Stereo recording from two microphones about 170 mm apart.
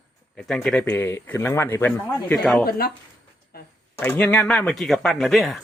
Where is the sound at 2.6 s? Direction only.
60° left (ahead or behind).